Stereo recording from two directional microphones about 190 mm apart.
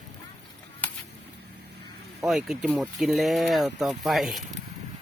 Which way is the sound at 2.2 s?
Centre (ahead or behind).